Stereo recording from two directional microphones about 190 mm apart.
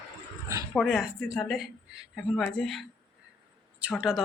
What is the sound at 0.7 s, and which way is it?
A woman's voice, centre (ahead or behind).